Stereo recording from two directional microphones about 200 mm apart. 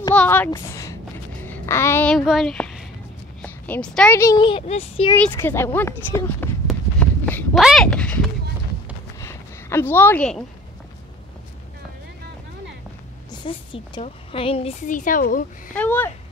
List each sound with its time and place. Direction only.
0.1 s a sound: 5° left (ahead or behind)
0.5 s a woman's voice: 15° left (ahead or behind)
4.2 s a woman's voice: 20° left (ahead or behind)
5.1 s a sound: 10° left (ahead or behind)
13.3 s a woman's voice: 25° left (ahead or behind); by 15.2 s 40° left (ahead or behind)
15.7 s speech: 10° left (ahead or behind)